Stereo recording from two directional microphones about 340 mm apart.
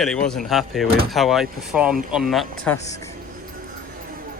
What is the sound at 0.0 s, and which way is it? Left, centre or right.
Speech, centre.